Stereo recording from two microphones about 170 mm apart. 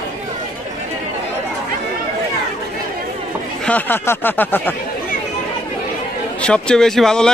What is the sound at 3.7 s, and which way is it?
Speech, 10° left (ahead or behind).